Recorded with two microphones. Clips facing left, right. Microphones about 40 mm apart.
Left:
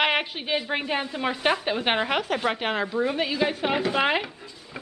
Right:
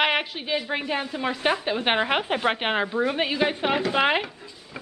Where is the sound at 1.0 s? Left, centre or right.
Centre.